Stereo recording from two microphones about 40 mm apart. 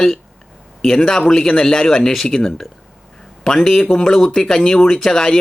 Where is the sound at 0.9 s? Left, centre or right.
Centre.